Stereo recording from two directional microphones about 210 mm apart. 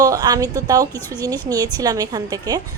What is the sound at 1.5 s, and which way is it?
A woman's voice, 15° right (ahead or behind).